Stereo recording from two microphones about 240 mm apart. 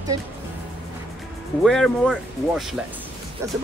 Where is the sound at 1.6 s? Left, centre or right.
Centre.